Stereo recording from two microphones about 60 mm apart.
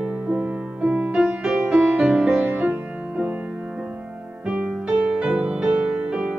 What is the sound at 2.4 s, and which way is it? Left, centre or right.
Music, right.